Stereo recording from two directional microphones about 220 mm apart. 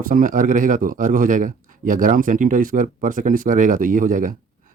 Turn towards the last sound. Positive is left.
turn(degrees=-35)  # may be behind; listen again after turning